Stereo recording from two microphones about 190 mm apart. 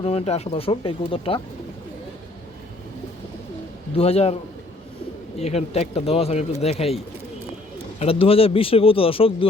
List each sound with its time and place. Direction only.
0.0 s speech: 30° left (ahead or behind)
3.9 s speech: 35° left (ahead or behind)
5.4 s speech: 35° left (ahead or behind)
7.9 s speech: 30° left (ahead or behind)